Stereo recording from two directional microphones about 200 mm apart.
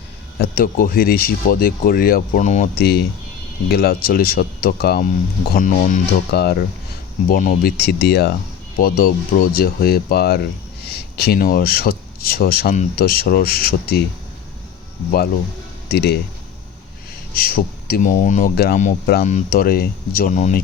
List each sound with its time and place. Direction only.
0.3 s speech: 50° left (ahead or behind)
15.9 s speech: 50° left (ahead or behind)
17.3 s speech: 50° left (ahead or behind)